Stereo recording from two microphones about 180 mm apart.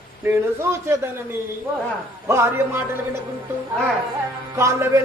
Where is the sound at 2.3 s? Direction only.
15° right (ahead or behind).